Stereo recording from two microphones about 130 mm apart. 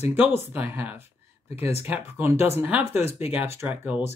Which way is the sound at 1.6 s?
55° left (ahead or behind).